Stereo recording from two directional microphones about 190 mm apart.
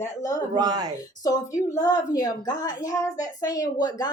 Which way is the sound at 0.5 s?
20° right (ahead or behind).